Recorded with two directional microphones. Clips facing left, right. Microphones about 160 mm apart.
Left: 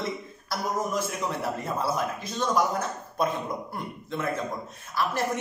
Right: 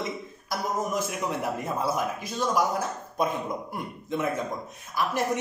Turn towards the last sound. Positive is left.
turn(degrees=-15)  # may be behind; listen again after turning